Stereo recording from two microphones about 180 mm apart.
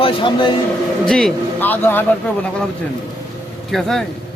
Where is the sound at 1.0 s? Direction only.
5° left (ahead or behind).